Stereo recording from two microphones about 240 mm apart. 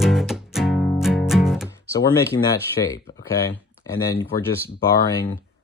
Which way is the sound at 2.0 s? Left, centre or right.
Centre.